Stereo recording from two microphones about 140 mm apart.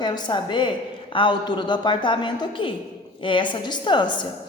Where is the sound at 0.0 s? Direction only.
35° left (ahead or behind).